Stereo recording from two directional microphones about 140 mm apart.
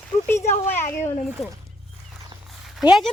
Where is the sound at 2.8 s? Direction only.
5° right (ahead or behind).